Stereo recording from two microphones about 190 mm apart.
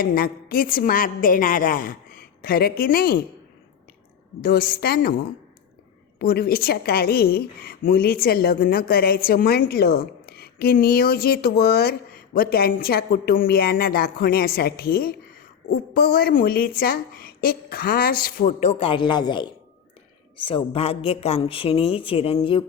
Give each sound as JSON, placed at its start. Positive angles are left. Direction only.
{"t": 0.0, "sound": "a woman's voice", "side_deg": 50}
{"t": 4.4, "sound": "a woman's voice", "side_deg": 50}
{"t": 6.1, "sound": "a woman's voice", "side_deg": 55}